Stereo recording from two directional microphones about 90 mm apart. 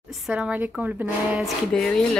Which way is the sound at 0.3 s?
15° right (ahead or behind).